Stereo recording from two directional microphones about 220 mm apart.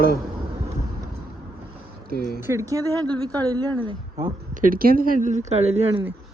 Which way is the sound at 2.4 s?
15° right (ahead or behind).